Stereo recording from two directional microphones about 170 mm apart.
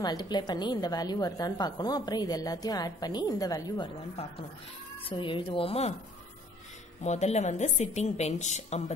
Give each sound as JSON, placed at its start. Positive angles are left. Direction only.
{"t": 0.0, "sound": "a woman's voice", "side_deg": 25}
{"t": 5.1, "sound": "a woman's voice", "side_deg": 30}
{"t": 7.0, "sound": "speech", "side_deg": 40}